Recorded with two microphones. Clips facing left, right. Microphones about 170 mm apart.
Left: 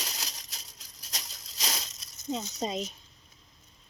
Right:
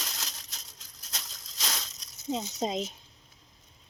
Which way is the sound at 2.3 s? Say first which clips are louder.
Right 2 dB; 15° right (ahead or behind).